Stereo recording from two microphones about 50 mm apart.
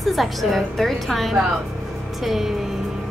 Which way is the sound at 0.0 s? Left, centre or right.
Centre.